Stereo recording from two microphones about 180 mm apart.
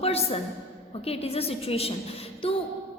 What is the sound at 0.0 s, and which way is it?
A woman's voice, 35° left (ahead or behind).